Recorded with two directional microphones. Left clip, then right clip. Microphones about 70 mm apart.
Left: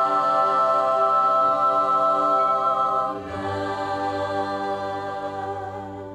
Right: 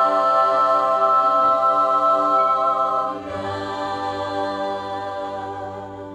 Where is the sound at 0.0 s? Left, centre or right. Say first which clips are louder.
Right 3 dB; right.